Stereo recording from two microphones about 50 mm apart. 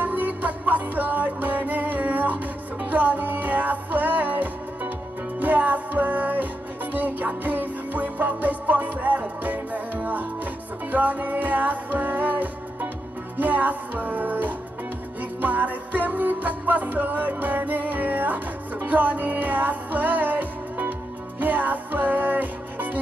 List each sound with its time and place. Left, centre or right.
0.0 s music: right